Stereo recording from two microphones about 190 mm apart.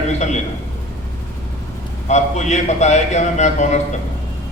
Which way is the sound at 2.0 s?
40° left (ahead or behind).